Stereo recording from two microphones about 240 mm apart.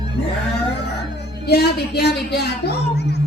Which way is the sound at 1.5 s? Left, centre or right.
Left.